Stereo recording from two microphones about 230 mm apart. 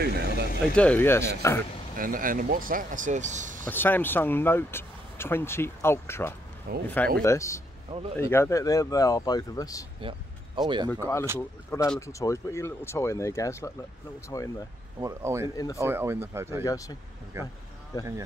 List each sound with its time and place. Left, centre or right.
0.0 s vehicle: right
0.7 s speech: centre
2.0 s speech: right
3.6 s speech: centre
6.7 s speech: right
7.2 s speech: centre
9.9 s vehicle: right
10.9 s speech: centre
15.0 s speech: centre
15.5 s speech: centre
15.8 s speech: centre
16.6 s speech: centre
17.3 s speech: centre